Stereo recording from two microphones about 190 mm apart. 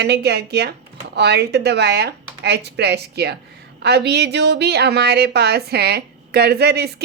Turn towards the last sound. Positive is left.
turn(degrees=-60)  # may be behind; listen again after turning